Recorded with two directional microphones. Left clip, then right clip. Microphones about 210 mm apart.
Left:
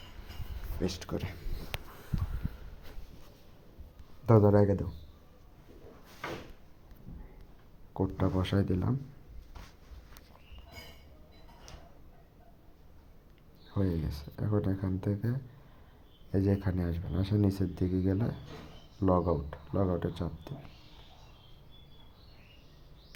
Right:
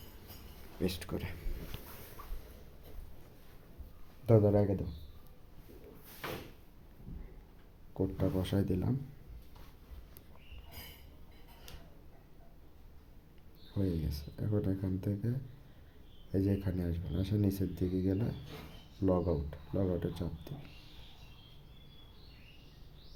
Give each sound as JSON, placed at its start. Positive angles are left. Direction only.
{"t": 0.8, "sound": "speech", "side_deg": 5}
{"t": 4.3, "sound": "speech", "side_deg": 20}
{"t": 7.9, "sound": "speech", "side_deg": 5}
{"t": 13.7, "sound": "speech", "side_deg": 5}